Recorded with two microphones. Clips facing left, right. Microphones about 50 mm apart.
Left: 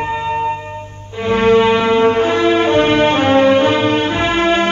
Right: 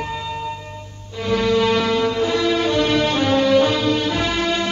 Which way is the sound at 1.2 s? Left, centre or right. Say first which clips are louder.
Left 6 dB; left.